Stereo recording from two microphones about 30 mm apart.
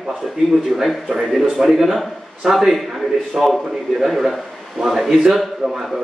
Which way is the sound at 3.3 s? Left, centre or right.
Right.